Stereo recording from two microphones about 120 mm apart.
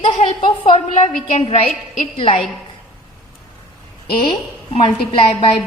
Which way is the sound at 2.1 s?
50° left (ahead or behind).